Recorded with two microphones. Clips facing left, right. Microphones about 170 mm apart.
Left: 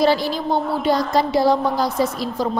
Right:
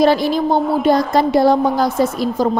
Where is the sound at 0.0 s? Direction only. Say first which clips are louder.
Right 4 dB; 55° right (ahead or behind).